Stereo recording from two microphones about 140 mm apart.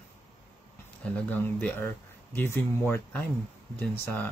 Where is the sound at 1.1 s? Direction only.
15° left (ahead or behind).